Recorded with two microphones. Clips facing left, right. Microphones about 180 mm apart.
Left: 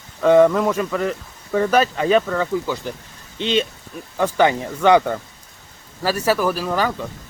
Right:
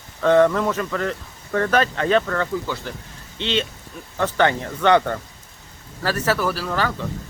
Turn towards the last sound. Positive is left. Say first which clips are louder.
# left 3 dB
turn(degrees=15)  # may be behind; listen again after turning